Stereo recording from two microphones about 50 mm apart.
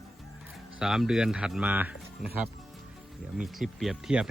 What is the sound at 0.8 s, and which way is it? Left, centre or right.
Speech, centre.